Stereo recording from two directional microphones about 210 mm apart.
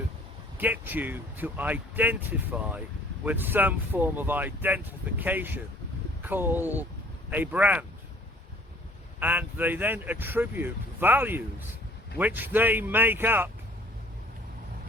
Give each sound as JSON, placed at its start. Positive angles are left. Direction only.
{"t": 0.6, "sound": "speech", "side_deg": -10}
{"t": 9.2, "sound": "speech", "side_deg": -10}